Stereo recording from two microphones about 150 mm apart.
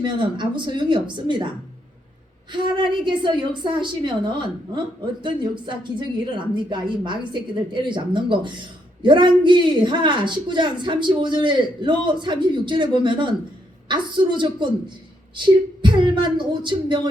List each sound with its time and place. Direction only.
0.0 s a woman's voice: 30° right (ahead or behind)
2.5 s a woman's voice: 30° right (ahead or behind)